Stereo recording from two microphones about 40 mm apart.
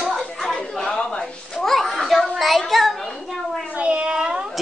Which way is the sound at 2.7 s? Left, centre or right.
Centre.